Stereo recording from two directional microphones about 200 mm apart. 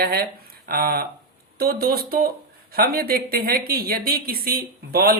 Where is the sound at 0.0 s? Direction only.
50° right (ahead or behind).